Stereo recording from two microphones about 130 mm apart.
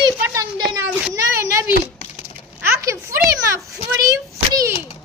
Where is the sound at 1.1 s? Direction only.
25° right (ahead or behind).